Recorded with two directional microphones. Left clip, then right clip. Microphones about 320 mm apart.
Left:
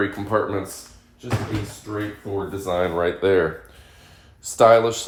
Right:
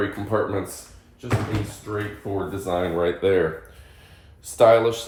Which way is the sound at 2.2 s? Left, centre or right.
Centre.